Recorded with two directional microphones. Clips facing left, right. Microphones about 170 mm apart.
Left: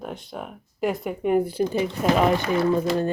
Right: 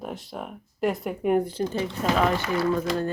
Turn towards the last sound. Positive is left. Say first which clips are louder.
# left 3 dB
turn(degrees=20)  # may be behind; listen again after turning